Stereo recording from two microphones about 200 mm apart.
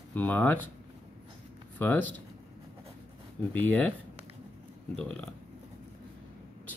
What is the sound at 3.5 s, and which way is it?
Speech, 10° left (ahead or behind).